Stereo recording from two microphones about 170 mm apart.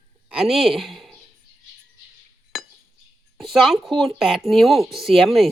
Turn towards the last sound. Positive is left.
turn(degrees=0)  # may be behind; listen again after turning